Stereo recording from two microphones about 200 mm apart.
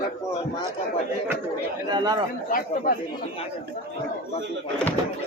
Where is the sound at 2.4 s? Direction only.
45° left (ahead or behind).